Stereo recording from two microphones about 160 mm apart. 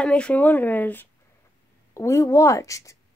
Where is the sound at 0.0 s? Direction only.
5° left (ahead or behind).